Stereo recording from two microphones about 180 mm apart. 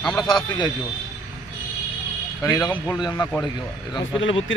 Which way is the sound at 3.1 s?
10° left (ahead or behind).